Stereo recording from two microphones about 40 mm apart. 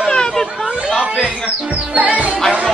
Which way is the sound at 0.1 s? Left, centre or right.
Centre.